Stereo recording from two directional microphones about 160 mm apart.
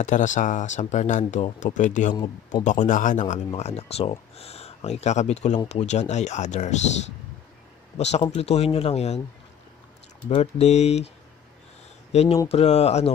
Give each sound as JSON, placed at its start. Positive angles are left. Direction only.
{"t": 0.0, "sound": "speech", "side_deg": 50}
{"t": 8.0, "sound": "speech", "side_deg": 45}
{"t": 10.3, "sound": "speech", "side_deg": 45}
{"t": 12.1, "sound": "speech", "side_deg": 40}